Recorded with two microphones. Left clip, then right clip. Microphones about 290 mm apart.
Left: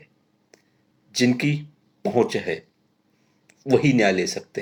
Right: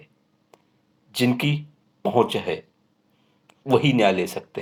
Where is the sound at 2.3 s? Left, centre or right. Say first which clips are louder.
Even; right.